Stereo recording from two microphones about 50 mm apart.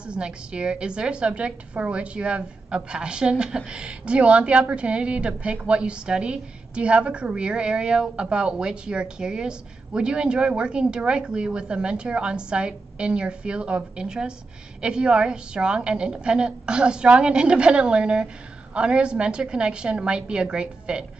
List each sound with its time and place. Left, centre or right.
0.0 s a woman's voice: centre